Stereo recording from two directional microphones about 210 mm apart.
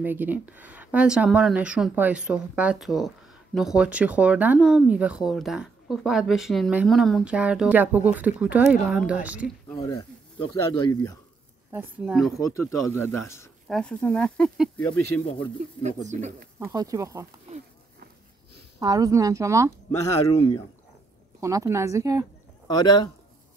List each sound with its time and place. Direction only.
0.0 s a woman's voice: 10° right (ahead or behind)
9.7 s speech: 15° left (ahead or behind)
11.7 s speech: 5° right (ahead or behind)
12.4 s speech: 15° left (ahead or behind)
15.0 s speech: 90° left
15.8 s speech: 35° right (ahead or behind)
16.7 s a woman's voice: 15° right (ahead or behind)
18.8 s a woman's voice: 15° right (ahead or behind)
21.4 s a woman's voice: 15° right (ahead or behind)
22.7 s a man's voice: 20° left (ahead or behind)